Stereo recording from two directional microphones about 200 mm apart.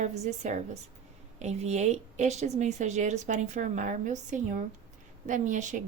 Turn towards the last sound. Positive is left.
turn(degrees=-40)  # may be behind; listen again after turning